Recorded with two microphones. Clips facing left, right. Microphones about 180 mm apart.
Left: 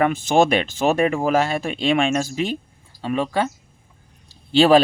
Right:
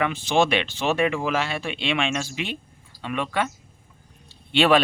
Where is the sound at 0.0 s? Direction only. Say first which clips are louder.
Left 4 dB; 45° left (ahead or behind).